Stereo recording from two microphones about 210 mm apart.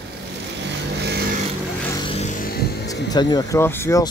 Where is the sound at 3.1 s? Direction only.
20° left (ahead or behind).